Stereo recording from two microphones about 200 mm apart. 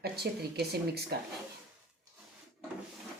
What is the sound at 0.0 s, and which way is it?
A woman's voice, 50° right (ahead or behind).